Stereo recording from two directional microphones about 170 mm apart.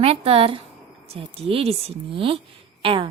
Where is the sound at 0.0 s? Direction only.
35° right (ahead or behind).